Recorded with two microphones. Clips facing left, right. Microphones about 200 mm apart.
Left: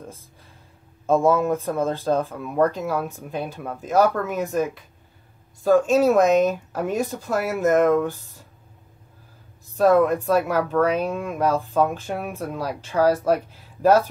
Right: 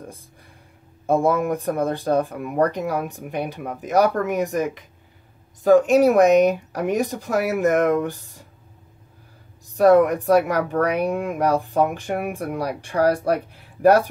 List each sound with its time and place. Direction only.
1.0 s speech: 15° right (ahead or behind)
9.8 s speech: 15° right (ahead or behind)